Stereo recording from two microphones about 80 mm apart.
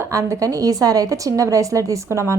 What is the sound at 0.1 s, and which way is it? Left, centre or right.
A woman's voice, right.